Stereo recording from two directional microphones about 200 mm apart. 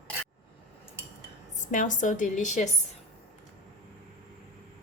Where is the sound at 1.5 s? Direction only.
40° left (ahead or behind).